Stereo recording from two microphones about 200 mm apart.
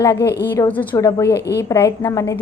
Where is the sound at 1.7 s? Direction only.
15° left (ahead or behind).